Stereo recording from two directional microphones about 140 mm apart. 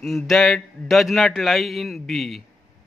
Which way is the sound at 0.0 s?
5° left (ahead or behind).